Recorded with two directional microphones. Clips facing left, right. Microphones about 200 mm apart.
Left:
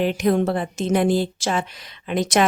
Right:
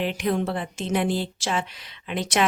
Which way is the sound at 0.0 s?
45° left (ahead or behind).